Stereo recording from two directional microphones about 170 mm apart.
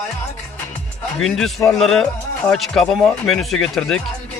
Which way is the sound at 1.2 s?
Centre (ahead or behind).